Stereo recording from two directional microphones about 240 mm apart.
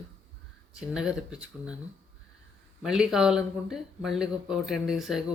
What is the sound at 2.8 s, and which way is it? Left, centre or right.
Speech, centre.